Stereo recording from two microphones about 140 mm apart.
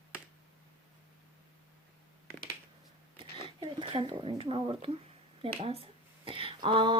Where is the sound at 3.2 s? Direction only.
40° right (ahead or behind).